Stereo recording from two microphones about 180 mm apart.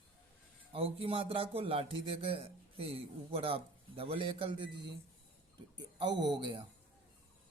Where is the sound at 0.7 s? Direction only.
30° right (ahead or behind).